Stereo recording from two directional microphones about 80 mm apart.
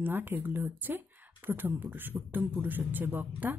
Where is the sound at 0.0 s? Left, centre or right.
Right.